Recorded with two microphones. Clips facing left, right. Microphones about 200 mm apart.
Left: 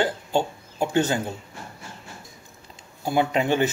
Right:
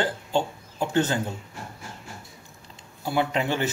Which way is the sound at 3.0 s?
15° left (ahead or behind).